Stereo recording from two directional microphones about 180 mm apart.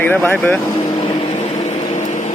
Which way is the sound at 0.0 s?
10° left (ahead or behind).